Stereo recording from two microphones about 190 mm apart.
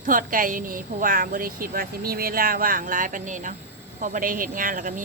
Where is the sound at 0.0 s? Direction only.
45° right (ahead or behind).